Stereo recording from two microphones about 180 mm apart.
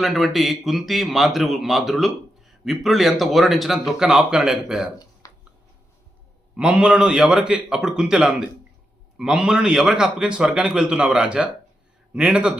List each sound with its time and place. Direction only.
0.0 s a man's voice: centre (ahead or behind)
5.2 s a sound: 20° left (ahead or behind)
6.6 s a man's voice: 5° right (ahead or behind)